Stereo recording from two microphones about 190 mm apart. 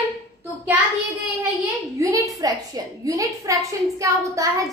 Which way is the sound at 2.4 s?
20° right (ahead or behind).